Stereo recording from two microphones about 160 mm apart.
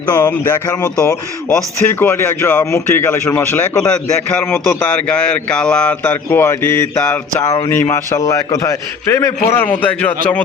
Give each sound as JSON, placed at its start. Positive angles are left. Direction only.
{"t": 0.1, "sound": "speech", "side_deg": 25}
{"t": 0.9, "sound": "a man's voice", "side_deg": 5}